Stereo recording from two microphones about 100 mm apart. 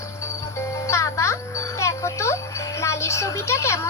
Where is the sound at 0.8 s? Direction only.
30° left (ahead or behind).